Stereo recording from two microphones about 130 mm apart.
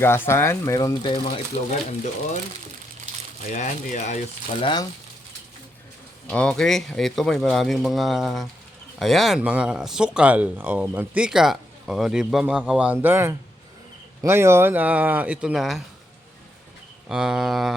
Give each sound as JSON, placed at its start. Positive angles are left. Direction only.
{"t": 0.0, "sound": "speech", "side_deg": 20}
{"t": 1.0, "sound": "speech", "side_deg": 45}
{"t": 3.5, "sound": "speech", "side_deg": 65}
{"t": 4.6, "sound": "speech", "side_deg": 35}
{"t": 6.2, "sound": "speech", "side_deg": 5}
{"t": 17.1, "sound": "speech", "side_deg": -5}